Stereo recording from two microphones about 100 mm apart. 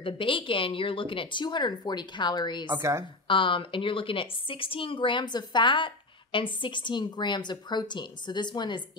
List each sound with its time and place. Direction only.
0.0 s a woman's voice: 60° left (ahead or behind)
2.8 s a woman's voice: 30° right (ahead or behind)
3.3 s a woman's voice: 60° left (ahead or behind)